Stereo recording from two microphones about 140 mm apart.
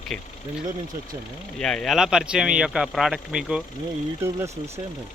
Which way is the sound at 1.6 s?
5° left (ahead or behind).